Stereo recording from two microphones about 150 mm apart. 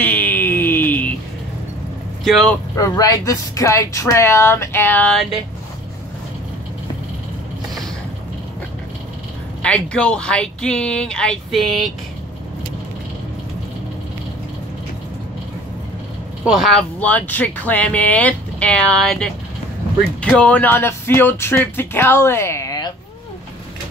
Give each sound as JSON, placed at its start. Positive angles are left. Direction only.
{"t": 0.0, "sound": "a sound", "side_deg": 10}
{"t": 2.2, "sound": "speech", "side_deg": 0}
{"t": 2.7, "sound": "a woman's voice", "side_deg": 20}
{"t": 9.6, "sound": "speech", "side_deg": 5}
{"t": 16.4, "sound": "speech", "side_deg": 0}